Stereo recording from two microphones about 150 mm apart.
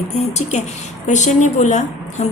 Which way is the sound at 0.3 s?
50° left (ahead or behind).